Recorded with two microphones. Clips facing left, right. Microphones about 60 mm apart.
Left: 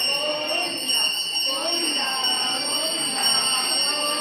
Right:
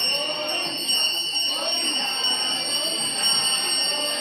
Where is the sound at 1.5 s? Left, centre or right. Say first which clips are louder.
Left 3 dB; left.